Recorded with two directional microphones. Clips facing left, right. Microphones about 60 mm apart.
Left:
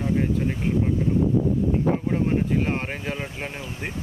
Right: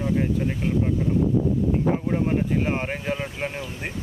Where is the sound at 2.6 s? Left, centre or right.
Centre.